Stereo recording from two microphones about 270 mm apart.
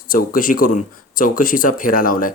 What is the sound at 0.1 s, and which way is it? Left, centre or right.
Speech, left.